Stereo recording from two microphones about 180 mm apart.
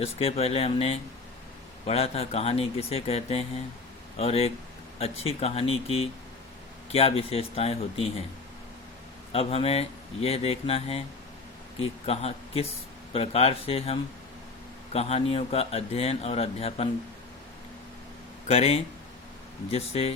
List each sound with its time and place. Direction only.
0.0 s speech: 35° left (ahead or behind)
9.3 s speech: 35° left (ahead or behind)
18.4 s speech: 35° left (ahead or behind)